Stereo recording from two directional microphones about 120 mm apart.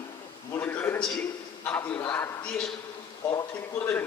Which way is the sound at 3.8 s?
20° left (ahead or behind).